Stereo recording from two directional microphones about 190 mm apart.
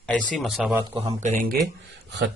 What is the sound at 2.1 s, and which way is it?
Speech, 70° right (ahead or behind).